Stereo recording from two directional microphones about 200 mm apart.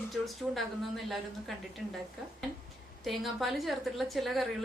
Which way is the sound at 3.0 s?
Centre (ahead or behind).